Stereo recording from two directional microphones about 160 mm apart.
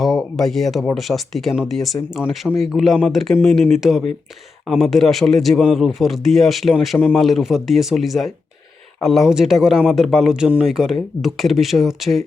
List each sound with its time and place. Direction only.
0.0 s speech: centre (ahead or behind)